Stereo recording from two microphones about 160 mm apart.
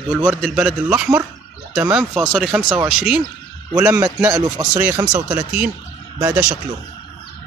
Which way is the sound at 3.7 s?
15° right (ahead or behind).